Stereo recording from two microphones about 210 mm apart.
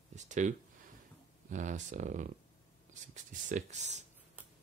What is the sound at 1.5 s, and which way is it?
Speech, 35° right (ahead or behind).